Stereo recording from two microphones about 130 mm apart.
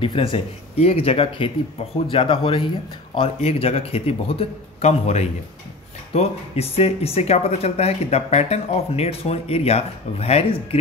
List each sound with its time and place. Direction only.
0.0 s speech: 45° left (ahead or behind)